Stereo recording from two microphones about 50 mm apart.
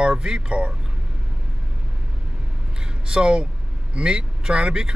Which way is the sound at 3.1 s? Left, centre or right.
Centre.